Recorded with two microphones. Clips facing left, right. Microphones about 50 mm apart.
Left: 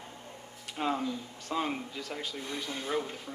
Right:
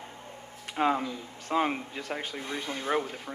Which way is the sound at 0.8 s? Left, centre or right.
Right.